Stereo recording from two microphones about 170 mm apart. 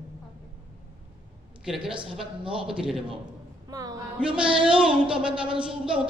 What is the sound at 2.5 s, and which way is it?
Speech, 5° right (ahead or behind).